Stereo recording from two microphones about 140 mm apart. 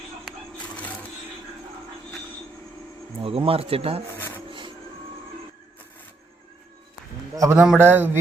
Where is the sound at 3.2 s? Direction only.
40° right (ahead or behind).